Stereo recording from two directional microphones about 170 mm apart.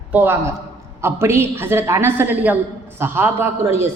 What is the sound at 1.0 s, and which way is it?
A woman's voice, 15° right (ahead or behind).